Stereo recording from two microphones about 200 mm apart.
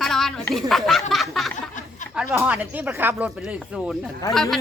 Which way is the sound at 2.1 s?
10° right (ahead or behind).